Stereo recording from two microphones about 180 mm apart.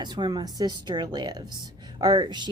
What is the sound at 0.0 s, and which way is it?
Speech, 25° right (ahead or behind).